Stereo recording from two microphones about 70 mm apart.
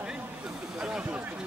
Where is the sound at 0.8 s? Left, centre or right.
Centre.